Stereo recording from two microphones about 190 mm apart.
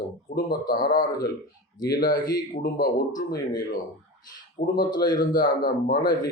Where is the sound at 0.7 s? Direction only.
50° left (ahead or behind).